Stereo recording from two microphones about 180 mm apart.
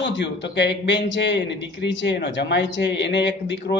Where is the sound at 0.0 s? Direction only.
80° left.